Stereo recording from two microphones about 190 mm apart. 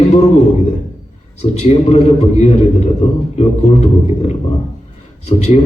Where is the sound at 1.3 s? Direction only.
35° left (ahead or behind).